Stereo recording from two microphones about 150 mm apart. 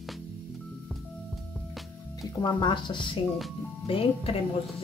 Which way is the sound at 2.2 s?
30° left (ahead or behind).